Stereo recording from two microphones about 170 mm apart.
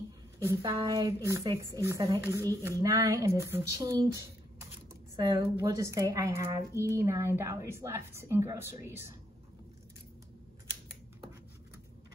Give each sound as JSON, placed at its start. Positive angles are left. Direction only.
{"t": 0.6, "sound": "speech", "side_deg": -20}